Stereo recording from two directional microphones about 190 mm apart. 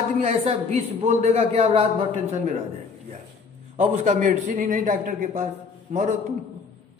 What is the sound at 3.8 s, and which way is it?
A man's voice, 40° right (ahead or behind).